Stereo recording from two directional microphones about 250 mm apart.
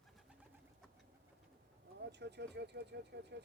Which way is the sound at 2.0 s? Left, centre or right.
Right.